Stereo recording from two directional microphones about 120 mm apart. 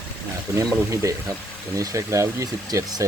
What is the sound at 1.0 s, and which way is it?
Speech, 25° right (ahead or behind).